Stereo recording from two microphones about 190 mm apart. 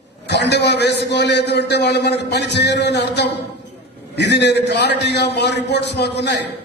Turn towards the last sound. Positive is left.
turn(degrees=65)  # may be behind; listen again after turning